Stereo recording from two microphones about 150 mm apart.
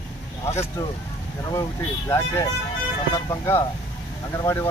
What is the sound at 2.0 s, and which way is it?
Speech, 20° left (ahead or behind).